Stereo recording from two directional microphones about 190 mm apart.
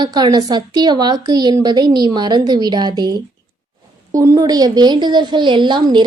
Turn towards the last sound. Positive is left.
turn(degrees=-25)  # may be behind; listen again after turning